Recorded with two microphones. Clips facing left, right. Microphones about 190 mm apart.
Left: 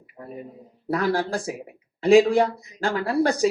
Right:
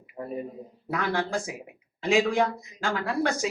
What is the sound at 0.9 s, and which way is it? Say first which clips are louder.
Speech: left 5 dB; 35° left (ahead or behind).